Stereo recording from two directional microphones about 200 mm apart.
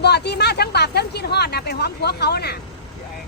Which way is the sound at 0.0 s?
55° left (ahead or behind).